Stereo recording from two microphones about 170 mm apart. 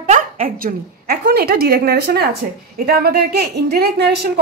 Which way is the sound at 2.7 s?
60° right (ahead or behind).